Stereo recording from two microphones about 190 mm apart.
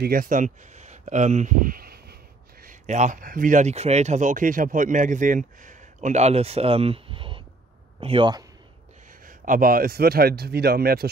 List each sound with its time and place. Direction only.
0.0 s speech: 50° right (ahead or behind)
2.6 s a man's voice: 40° right (ahead or behind); by 8.5 s 25° right (ahead or behind)
9.2 s a man's voice: 45° right (ahead or behind)